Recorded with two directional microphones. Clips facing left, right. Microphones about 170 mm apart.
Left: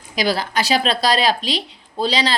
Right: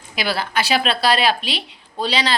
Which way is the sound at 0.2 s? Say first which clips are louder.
Left 2 dB; 40° left (ahead or behind).